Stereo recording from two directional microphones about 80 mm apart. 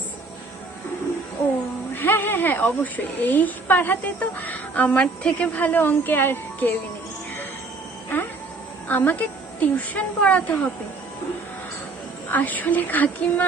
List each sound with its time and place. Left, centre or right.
2.0 s a woman's voice: left
8.9 s a woman's voice: left
12.3 s a woman's voice: left